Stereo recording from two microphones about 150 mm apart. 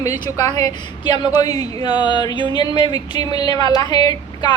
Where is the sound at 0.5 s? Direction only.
30° left (ahead or behind).